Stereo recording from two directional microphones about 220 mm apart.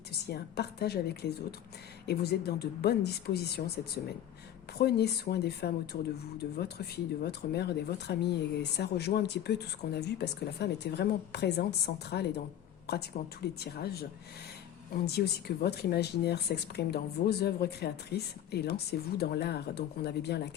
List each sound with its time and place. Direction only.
0.3 s speech: 45° left (ahead or behind)
4.8 s speech: 45° left (ahead or behind)